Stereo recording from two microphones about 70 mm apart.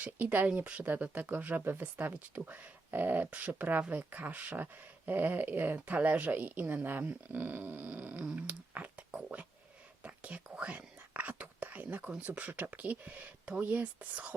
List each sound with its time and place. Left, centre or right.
0.0 s speech: right